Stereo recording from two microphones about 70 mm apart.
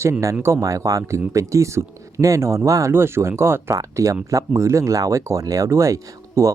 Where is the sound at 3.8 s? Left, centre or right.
Right.